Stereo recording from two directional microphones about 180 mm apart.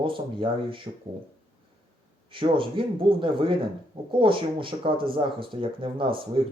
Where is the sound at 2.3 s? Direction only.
30° right (ahead or behind).